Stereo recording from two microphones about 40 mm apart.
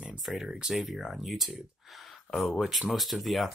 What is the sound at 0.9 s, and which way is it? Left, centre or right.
Speech, centre.